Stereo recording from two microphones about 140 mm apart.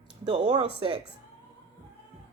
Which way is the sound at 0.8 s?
40° right (ahead or behind).